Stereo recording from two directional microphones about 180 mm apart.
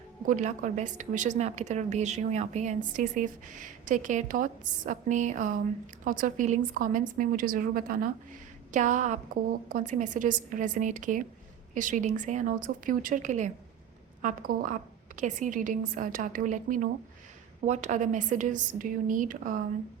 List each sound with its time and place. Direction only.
0.3 s a woman's voice: 45° right (ahead or behind)